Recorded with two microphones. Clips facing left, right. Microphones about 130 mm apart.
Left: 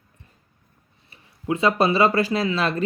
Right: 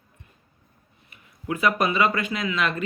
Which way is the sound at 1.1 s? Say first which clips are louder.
Left 4 dB; 30° left (ahead or behind).